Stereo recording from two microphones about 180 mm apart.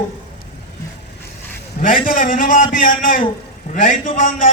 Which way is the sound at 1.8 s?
50° left (ahead or behind).